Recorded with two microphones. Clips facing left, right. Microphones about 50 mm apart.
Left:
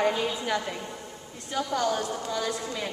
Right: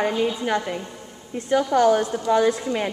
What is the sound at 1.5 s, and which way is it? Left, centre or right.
Speech, right.